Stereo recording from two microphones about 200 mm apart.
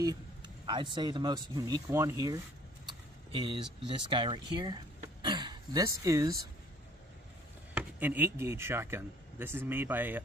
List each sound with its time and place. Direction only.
0.7 s speech: 20° right (ahead or behind)
7.7 s speech: 10° right (ahead or behind)